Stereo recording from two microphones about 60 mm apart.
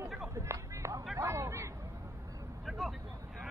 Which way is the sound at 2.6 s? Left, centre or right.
Centre.